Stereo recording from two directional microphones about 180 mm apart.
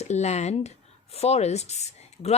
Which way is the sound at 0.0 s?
40° left (ahead or behind).